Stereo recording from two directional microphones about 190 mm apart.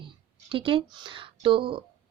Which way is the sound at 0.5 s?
25° right (ahead or behind).